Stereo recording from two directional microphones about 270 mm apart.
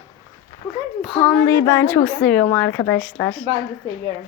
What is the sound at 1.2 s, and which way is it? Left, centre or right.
A woman's voice, centre.